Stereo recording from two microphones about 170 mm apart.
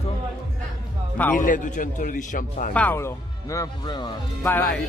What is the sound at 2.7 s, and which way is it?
Speech, 10° left (ahead or behind).